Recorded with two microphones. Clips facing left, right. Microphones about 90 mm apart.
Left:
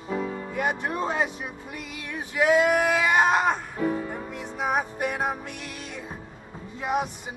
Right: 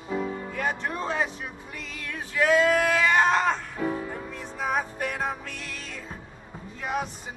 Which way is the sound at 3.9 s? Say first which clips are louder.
Left 2 dB; 25° left (ahead or behind).